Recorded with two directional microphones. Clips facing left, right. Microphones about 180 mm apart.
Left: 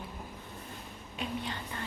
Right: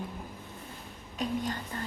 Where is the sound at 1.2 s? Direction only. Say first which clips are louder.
Right 5 dB; 40° right (ahead or behind).